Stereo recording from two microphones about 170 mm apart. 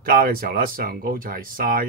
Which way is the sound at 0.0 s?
60° right (ahead or behind).